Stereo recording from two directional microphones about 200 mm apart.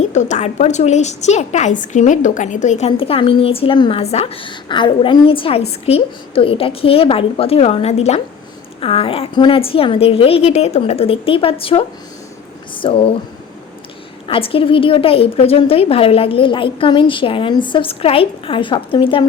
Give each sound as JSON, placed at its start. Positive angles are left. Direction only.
{"t": 0.1, "sound": "a woman's voice", "side_deg": 35}
{"t": 14.3, "sound": "a woman's voice", "side_deg": 25}